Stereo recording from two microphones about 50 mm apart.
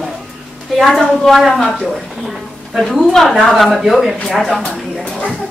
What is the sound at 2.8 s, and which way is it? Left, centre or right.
A woman's voice, centre.